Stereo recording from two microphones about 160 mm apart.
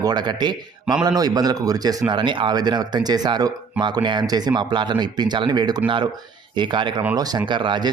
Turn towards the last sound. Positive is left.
turn(degrees=-30)  # may be behind; listen again after turning